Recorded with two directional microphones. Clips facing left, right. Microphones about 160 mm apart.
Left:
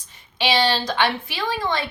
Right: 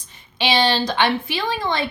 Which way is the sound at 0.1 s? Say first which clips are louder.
Right 1 dB; 20° right (ahead or behind).